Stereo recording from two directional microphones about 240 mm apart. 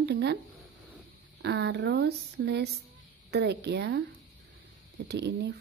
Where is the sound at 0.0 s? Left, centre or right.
Right.